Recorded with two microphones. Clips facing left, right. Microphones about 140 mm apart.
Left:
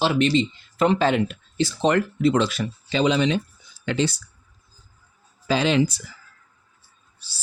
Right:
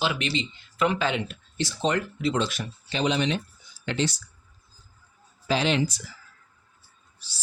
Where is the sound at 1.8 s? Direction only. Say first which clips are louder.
Left 6 dB; 60° left (ahead or behind).